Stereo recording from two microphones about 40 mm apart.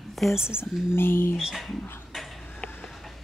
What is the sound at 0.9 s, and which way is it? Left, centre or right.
Speech, left.